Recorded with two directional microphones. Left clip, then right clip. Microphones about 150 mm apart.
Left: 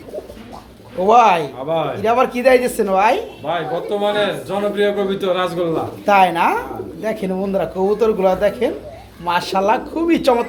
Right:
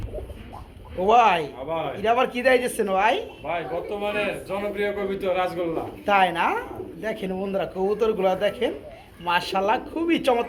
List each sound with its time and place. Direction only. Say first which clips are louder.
0.9 s speech: left 6 dB; 5° left (ahead or behind)
1.6 s a man's voice: left 8 dB; 60° left (ahead or behind)
2.0 s speech: left 4 dB; 5° left (ahead or behind)
3.5 s a man's voice: left 8 dB; 45° left (ahead or behind)
6.1 s speech: left 7 dB; 10° left (ahead or behind)